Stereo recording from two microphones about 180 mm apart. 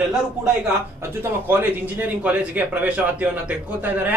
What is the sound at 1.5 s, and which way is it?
A man's voice, 10° right (ahead or behind).